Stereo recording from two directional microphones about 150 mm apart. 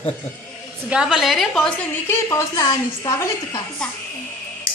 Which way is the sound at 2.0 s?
20° left (ahead or behind).